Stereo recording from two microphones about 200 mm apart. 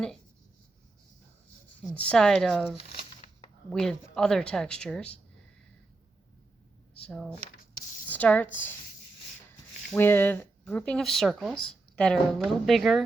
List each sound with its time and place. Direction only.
1.8 s speech: 5° left (ahead or behind)
3.7 s speech: 5° left (ahead or behind)
7.0 s speech: centre (ahead or behind)
9.9 s speech: 10° left (ahead or behind)